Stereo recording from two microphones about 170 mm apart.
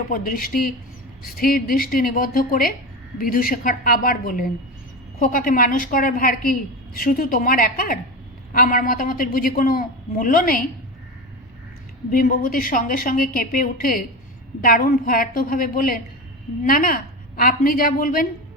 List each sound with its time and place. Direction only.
0.1 s a woman's voice: 55° left (ahead or behind)
12.1 s a woman's voice: 55° left (ahead or behind)